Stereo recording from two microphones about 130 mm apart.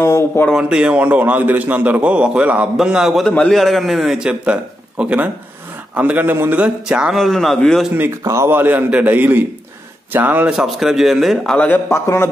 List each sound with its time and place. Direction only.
0.0 s speech: 20° left (ahead or behind)
0.5 s a man's voice: 5° right (ahead or behind)
7.9 s a man's voice: 20° right (ahead or behind); by 12.3 s 20° left (ahead or behind)